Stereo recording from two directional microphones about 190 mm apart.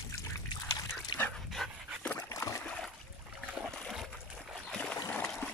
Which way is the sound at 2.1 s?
15° left (ahead or behind).